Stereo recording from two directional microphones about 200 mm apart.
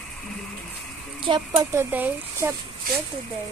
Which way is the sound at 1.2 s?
25° right (ahead or behind).